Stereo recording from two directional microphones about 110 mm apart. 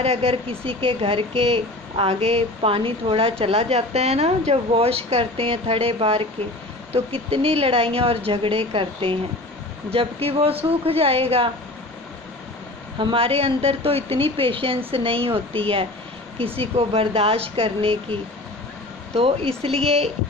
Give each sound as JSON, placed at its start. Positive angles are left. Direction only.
{"t": 0.0, "sound": "speech", "side_deg": -70}
{"t": 13.0, "sound": "speech", "side_deg": -55}